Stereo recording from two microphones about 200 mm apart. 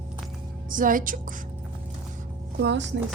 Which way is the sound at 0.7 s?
40° right (ahead or behind).